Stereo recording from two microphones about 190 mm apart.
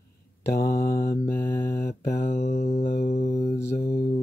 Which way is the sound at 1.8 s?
45° left (ahead or behind).